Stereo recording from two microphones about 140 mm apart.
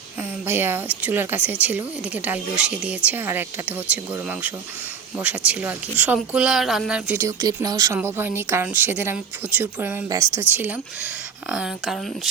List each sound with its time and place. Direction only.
0.4 s speech: 15° right (ahead or behind)
7.3 s speech: 25° right (ahead or behind); by 12.3 s 5° right (ahead or behind)